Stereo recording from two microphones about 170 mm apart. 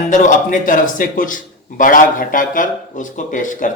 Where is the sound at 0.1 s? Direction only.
50° left (ahead or behind).